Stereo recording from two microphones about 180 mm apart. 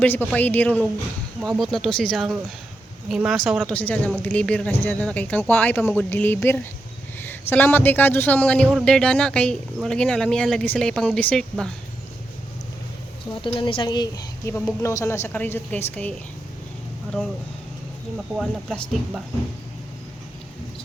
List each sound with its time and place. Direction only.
0.0 s a woman's voice: 10° left (ahead or behind)
13.4 s a woman's voice: 30° left (ahead or behind); by 15.8 s 10° left (ahead or behind)
18.3 s a man's voice: 5° right (ahead or behind)